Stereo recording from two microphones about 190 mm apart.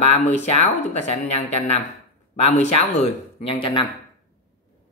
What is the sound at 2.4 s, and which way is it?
Speech, 35° left (ahead or behind).